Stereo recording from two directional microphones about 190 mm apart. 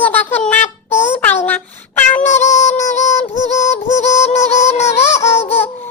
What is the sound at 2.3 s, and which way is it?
Music, 40° left (ahead or behind).